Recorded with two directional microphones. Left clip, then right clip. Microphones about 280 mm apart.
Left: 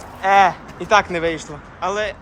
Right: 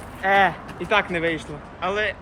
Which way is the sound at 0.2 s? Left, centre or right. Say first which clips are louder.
Left 5 dB; centre.